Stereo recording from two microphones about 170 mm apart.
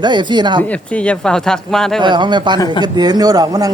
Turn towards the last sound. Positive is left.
turn(degrees=-20)  # may be behind; listen again after turning